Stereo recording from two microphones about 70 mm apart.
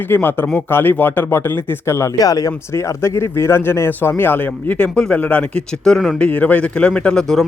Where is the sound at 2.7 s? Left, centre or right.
Left.